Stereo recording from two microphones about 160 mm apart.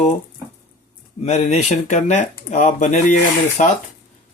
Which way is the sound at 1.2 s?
45° left (ahead or behind).